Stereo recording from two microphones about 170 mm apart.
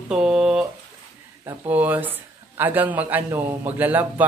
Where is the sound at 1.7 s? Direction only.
10° right (ahead or behind).